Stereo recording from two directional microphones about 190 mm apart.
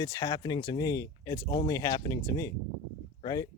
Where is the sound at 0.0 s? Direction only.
20° left (ahead or behind).